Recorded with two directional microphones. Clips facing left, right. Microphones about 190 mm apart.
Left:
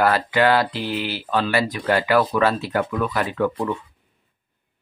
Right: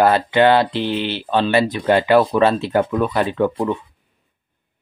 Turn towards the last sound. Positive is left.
turn(degrees=-25)  # may be behind; listen again after turning